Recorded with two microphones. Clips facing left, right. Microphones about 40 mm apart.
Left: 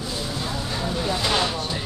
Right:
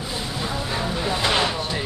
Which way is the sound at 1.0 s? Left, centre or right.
Centre.